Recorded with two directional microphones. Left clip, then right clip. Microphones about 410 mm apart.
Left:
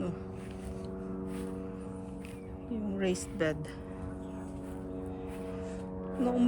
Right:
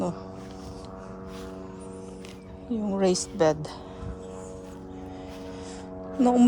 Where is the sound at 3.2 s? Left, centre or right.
Centre.